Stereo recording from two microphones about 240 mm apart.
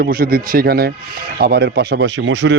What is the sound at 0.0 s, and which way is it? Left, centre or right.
Speech, right.